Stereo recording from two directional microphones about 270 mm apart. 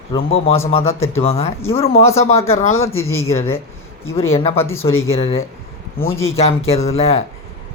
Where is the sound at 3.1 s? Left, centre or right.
Left.